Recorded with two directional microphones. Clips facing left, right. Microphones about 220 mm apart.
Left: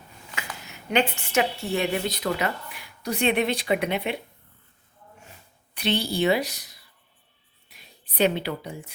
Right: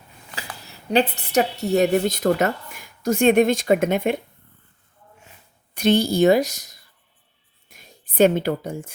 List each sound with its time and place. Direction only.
0.3 s a woman's voice: 35° right (ahead or behind)
5.7 s speech: 45° right (ahead or behind)